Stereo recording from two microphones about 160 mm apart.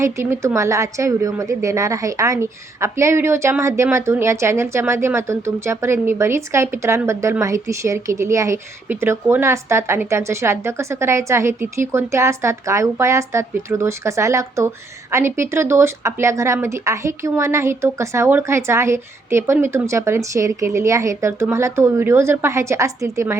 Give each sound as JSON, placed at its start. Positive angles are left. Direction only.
{"t": 0.0, "sound": "a woman's voice", "side_deg": -15}